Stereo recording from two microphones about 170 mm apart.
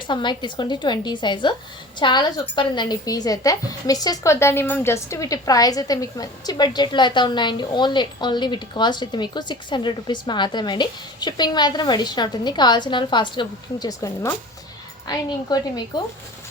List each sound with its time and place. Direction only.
0.1 s a woman's voice: 25° left (ahead or behind)